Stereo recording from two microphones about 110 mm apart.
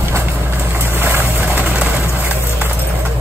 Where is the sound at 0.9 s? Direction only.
25° right (ahead or behind).